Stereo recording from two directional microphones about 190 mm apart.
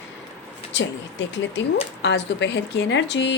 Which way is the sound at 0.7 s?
70° left (ahead or behind).